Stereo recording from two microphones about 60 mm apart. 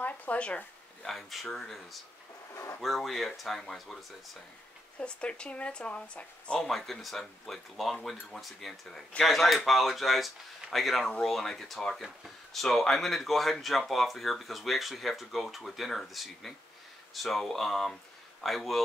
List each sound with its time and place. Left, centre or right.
0.0 s speech: left
1.0 s speech: centre
2.5 s speech: left
2.8 s speech: centre
5.0 s speech: centre
6.6 s speech: centre